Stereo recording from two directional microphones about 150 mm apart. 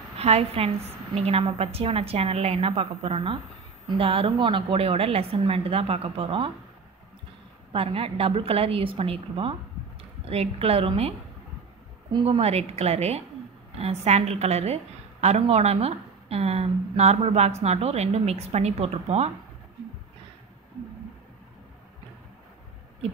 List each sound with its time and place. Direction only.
0.2 s a woman's voice: 40° right (ahead or behind)
7.7 s a woman's voice: 40° right (ahead or behind)
12.3 s a woman's voice: 45° right (ahead or behind)